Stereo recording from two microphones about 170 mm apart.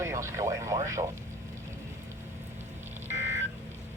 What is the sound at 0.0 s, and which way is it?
Speech, 15° right (ahead or behind).